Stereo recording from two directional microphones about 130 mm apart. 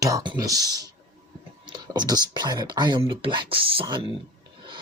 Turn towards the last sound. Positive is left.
turn(degrees=-40)  # may be behind; listen again after turning